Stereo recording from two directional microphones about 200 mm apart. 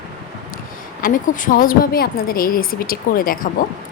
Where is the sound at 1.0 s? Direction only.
45° left (ahead or behind).